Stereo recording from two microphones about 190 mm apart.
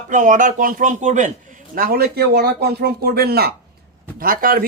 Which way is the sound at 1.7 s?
55° right (ahead or behind).